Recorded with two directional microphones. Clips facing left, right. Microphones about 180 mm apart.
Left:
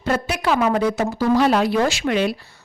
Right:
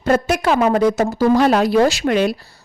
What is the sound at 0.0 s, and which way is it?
Speech, 45° right (ahead or behind).